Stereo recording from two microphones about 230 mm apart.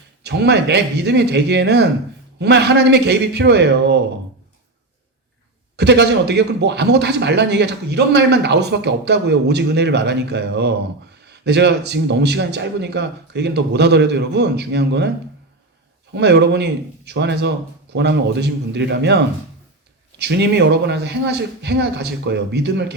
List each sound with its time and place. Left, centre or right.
0.2 s a man's voice: right
5.7 s a man's voice: right
16.1 s a man's voice: right